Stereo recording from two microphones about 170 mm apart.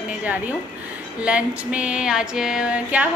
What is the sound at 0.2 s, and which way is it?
Music, 10° right (ahead or behind).